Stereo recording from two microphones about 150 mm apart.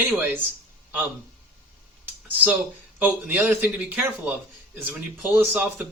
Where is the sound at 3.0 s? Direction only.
10° right (ahead or behind).